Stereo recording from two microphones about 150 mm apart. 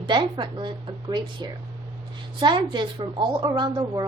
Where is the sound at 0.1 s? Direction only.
30° right (ahead or behind).